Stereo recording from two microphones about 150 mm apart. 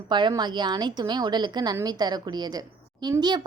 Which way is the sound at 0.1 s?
30° right (ahead or behind).